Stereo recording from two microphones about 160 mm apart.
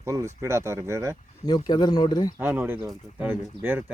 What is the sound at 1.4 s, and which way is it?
Speech, 25° left (ahead or behind).